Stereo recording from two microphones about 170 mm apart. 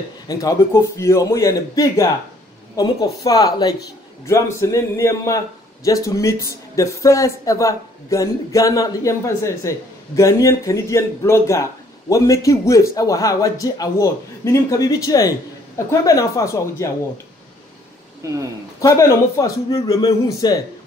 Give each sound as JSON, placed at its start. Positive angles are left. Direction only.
{"t": 0.3, "sound": "a man's voice", "side_deg": 20}
{"t": 18.2, "sound": "speech", "side_deg": -20}
{"t": 18.8, "sound": "speech", "side_deg": 20}